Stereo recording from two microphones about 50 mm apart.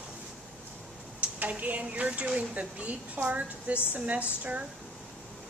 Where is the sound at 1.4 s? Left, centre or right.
Right.